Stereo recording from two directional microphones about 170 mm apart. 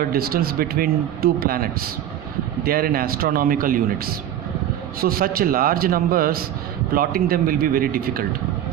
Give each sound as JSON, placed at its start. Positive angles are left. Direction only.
{"t": 0.1, "sound": "speech", "side_deg": -60}